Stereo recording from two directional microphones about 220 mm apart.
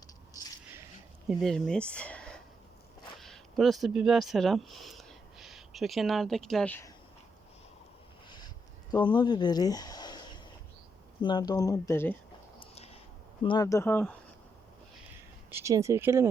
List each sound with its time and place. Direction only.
1.3 s speech: centre (ahead or behind)
8.9 s speech: 20° left (ahead or behind)
12.5 s a sound: 25° left (ahead or behind)
13.4 s speech: 20° left (ahead or behind)
15.4 s speech: 10° right (ahead or behind)